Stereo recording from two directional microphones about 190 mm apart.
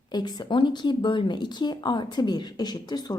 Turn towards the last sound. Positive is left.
turn(degrees=20)  # may be behind; listen again after turning